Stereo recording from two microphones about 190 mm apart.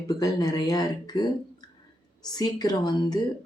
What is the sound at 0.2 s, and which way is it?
Speech, 20° left (ahead or behind).